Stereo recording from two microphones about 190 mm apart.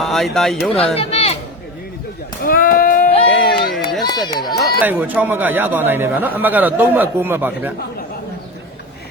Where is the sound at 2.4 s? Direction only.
50° left (ahead or behind).